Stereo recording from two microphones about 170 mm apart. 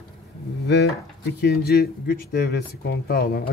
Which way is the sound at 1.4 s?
65° left (ahead or behind).